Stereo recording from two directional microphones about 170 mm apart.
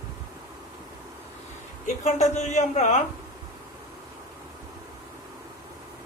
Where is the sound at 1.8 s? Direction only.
45° left (ahead or behind).